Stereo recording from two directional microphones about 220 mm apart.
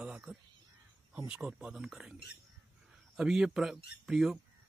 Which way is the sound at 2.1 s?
50° left (ahead or behind).